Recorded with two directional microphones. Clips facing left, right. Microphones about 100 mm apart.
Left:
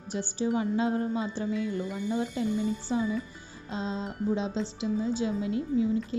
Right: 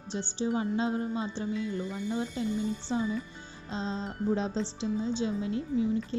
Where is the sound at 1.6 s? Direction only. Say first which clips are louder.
Left 2 dB; 20° left (ahead or behind).